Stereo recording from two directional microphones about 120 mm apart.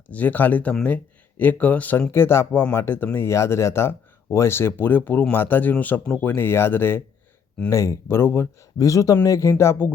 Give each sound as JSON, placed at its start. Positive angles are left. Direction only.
{"t": 0.1, "sound": "speech", "side_deg": 15}